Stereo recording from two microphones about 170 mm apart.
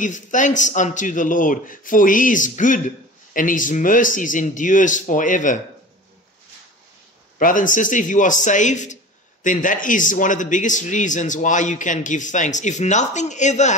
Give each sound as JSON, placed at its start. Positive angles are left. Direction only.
{"t": 0.0, "sound": "a man's voice", "side_deg": 50}
{"t": 7.3, "sound": "a man's voice", "side_deg": 50}